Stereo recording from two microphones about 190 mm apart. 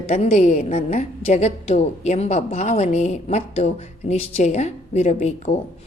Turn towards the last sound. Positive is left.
turn(degrees=35)  # may be behind; listen again after turning